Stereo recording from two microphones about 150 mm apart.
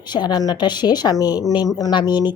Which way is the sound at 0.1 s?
30° left (ahead or behind).